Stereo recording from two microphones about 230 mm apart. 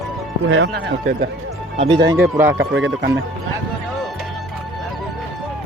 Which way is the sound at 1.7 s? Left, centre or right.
Right.